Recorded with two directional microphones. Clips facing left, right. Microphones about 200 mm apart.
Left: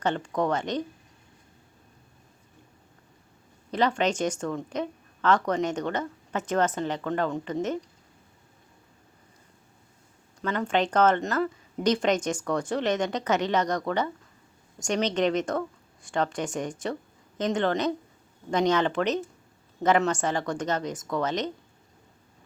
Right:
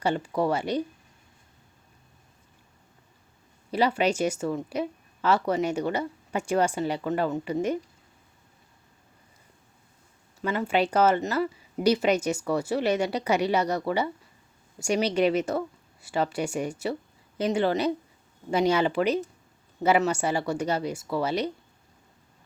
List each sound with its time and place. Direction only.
0.0 s speech: 10° right (ahead or behind)
3.7 s speech: 10° right (ahead or behind)
10.4 s a woman's voice: 5° right (ahead or behind)